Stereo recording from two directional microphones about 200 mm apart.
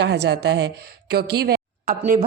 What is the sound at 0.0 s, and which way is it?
A woman's voice, 60° right (ahead or behind).